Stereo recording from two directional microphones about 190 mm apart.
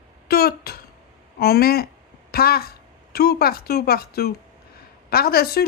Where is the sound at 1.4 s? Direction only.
55° left (ahead or behind).